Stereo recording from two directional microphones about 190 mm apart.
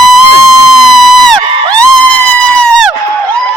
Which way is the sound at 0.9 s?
Centre (ahead or behind).